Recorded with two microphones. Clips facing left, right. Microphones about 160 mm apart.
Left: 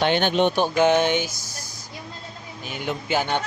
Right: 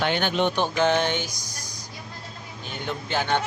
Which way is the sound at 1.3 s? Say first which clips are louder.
Left 1 dB; 15° right (ahead or behind).